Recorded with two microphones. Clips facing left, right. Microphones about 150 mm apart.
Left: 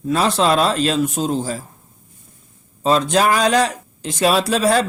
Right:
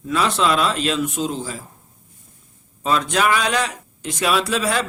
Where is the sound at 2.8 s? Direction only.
30° left (ahead or behind).